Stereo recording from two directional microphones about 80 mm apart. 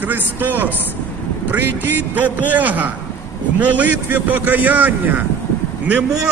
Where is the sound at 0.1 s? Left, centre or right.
Right.